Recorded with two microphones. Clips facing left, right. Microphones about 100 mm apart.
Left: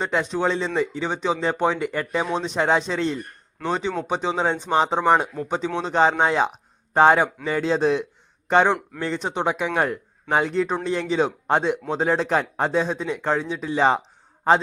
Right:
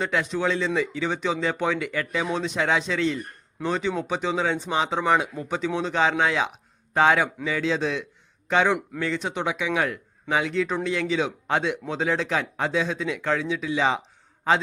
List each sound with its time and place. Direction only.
0.0 s a man's voice: 25° left (ahead or behind); by 14.0 s 40° left (ahead or behind)